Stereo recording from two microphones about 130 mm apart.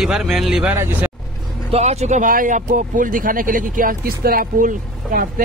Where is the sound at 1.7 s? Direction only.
55° right (ahead or behind).